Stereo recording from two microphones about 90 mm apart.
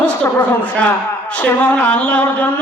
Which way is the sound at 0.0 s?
15° left (ahead or behind).